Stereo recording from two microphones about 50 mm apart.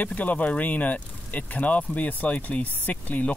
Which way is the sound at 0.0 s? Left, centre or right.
Left.